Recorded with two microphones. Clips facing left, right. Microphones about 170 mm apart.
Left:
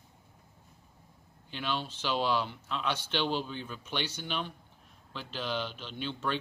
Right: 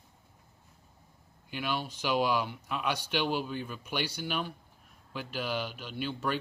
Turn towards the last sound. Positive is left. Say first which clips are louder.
# right 1 dB
turn(degrees=-10)  # may be behind; listen again after turning